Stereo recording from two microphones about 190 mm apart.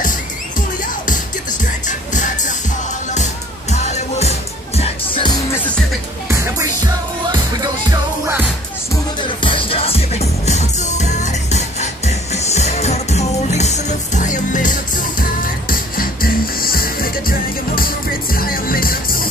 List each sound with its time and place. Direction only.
0.6 s music: 45° left (ahead or behind)
3.7 s music: 35° left (ahead or behind)
6.2 s music: 15° right (ahead or behind)
9.4 s music: 25° left (ahead or behind); by 19.2 s 50° left (ahead or behind)